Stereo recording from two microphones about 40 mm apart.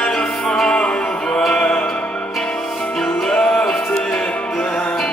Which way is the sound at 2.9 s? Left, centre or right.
Centre.